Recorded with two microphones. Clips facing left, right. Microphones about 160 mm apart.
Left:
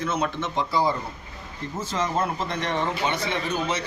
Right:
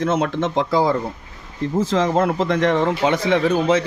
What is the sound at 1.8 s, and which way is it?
Speech, 90° right.